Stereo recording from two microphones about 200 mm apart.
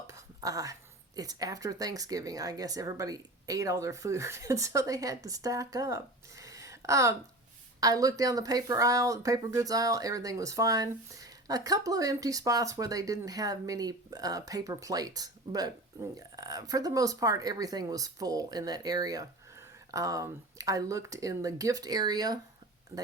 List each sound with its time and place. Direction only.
0.1 s speech: 15° right (ahead or behind)